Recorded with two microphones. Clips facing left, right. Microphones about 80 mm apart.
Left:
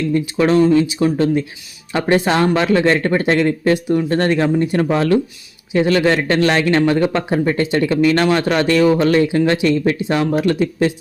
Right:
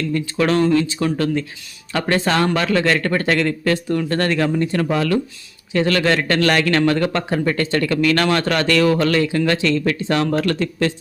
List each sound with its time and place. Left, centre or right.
0.1 s speech: left
5.7 s speech: centre